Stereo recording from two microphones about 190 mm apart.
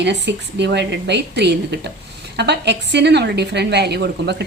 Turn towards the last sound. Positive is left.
turn(degrees=-60)  # may be behind; listen again after turning